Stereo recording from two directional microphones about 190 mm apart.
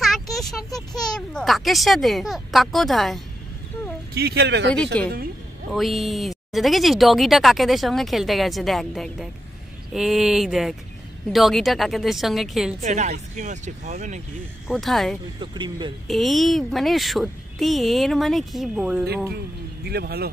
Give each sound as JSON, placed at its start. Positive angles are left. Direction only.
{"t": 0.0, "sound": "a sound", "side_deg": 0}
{"t": 1.1, "sound": "speech", "side_deg": 0}
{"t": 4.1, "sound": "speech", "side_deg": -55}
{"t": 4.9, "sound": "a woman's voice", "side_deg": 5}
{"t": 12.8, "sound": "speech", "side_deg": -40}
{"t": 14.7, "sound": "speech", "side_deg": 0}
{"t": 15.4, "sound": "speech", "side_deg": -25}
{"t": 16.1, "sound": "speech", "side_deg": 0}
{"t": 19.3, "sound": "speech", "side_deg": -55}